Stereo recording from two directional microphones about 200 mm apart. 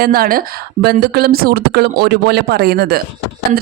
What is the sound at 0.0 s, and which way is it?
Speech, 45° right (ahead or behind).